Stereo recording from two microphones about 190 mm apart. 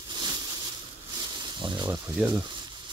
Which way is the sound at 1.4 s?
25° right (ahead or behind).